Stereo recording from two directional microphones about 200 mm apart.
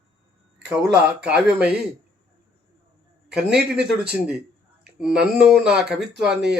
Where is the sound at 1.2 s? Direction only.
5° right (ahead or behind).